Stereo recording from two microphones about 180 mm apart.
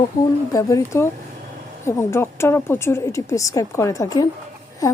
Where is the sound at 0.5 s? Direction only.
15° left (ahead or behind).